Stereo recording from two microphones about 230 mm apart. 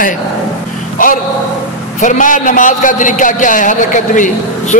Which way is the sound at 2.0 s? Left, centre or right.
Left.